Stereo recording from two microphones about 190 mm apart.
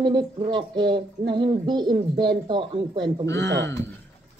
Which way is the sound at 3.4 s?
70° right (ahead or behind).